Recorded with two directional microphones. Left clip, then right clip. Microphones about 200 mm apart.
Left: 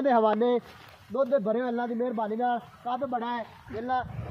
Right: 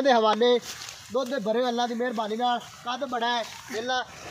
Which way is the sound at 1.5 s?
30° left (ahead or behind).